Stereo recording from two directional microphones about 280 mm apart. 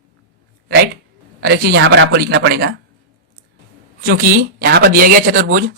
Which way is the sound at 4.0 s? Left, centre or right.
Right.